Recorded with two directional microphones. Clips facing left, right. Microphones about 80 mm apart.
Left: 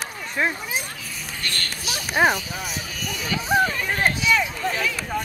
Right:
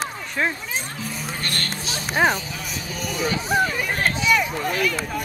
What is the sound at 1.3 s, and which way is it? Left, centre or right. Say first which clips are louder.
Speech: left 1 dB; right.